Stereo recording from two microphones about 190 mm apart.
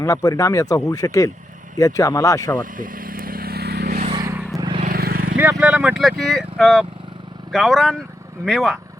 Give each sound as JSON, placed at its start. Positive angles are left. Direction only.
{"t": 0.0, "sound": "speech", "side_deg": 20}
{"t": 2.6, "sound": "vehicle", "side_deg": -45}
{"t": 4.1, "sound": "vehicle", "side_deg": -15}
{"t": 4.8, "sound": "vehicle", "side_deg": -50}
{"t": 5.4, "sound": "speech", "side_deg": -10}